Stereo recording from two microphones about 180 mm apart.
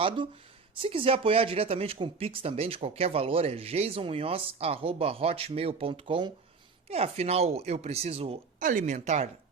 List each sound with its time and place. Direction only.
0.8 s speech: 30° right (ahead or behind)
8.6 s speech: 45° right (ahead or behind)